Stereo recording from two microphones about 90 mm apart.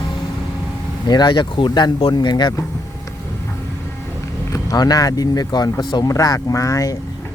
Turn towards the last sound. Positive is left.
turn(degrees=40)  # may be behind; listen again after turning